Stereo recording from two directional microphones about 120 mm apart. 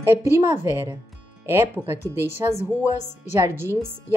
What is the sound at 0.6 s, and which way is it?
A woman's voice, 20° right (ahead or behind).